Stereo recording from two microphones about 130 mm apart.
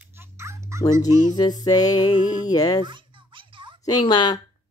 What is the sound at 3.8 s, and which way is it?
Speech, 35° left (ahead or behind).